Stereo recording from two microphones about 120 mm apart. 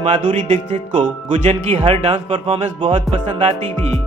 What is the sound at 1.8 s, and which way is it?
Speech, 55° right (ahead or behind).